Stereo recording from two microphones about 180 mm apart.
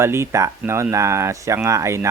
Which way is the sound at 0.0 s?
15° right (ahead or behind).